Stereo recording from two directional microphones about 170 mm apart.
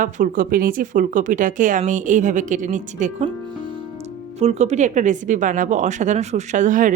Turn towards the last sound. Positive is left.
turn(degrees=-50)  # may be behind; listen again after turning